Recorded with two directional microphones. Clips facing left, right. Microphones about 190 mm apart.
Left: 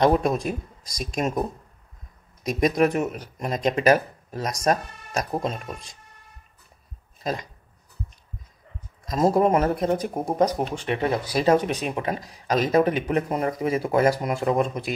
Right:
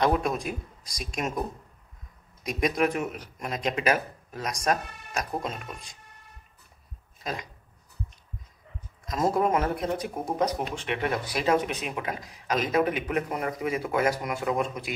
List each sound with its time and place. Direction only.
0.0 s speech: 40° left (ahead or behind)
2.4 s speech: 40° left (ahead or behind)
9.0 s speech: 35° left (ahead or behind)